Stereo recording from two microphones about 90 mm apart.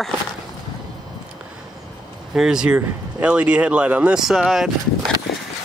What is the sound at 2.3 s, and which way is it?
Speech, 10° right (ahead or behind).